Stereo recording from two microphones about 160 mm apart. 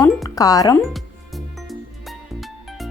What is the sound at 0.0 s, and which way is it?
Speech, 20° left (ahead or behind).